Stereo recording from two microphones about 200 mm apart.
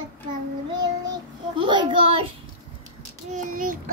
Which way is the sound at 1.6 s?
25° right (ahead or behind).